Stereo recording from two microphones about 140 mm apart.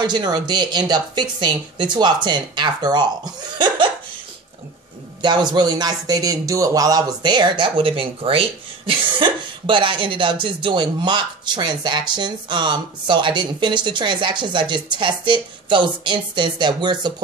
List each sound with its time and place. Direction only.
0.0 s speech: 30° right (ahead or behind)
5.2 s speech: 30° right (ahead or behind)